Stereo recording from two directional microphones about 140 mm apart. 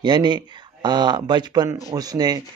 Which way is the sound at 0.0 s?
30° right (ahead or behind).